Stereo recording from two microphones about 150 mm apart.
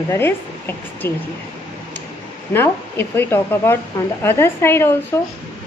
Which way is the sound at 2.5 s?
15° left (ahead or behind).